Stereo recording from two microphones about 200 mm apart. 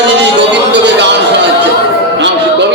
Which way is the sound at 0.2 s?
60° right (ahead or behind).